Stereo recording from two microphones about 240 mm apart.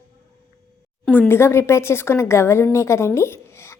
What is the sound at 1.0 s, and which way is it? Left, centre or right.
Speech, centre.